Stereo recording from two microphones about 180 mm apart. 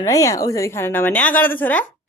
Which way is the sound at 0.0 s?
20° left (ahead or behind).